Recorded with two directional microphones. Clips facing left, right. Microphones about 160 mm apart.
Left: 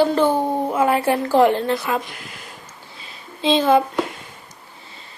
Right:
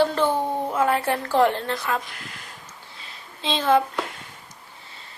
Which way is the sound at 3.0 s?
15° left (ahead or behind).